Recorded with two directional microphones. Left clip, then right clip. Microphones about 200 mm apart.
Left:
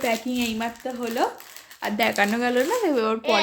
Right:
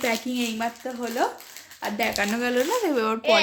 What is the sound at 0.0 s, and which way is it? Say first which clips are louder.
Speech: left 1 dB; centre (ahead or behind).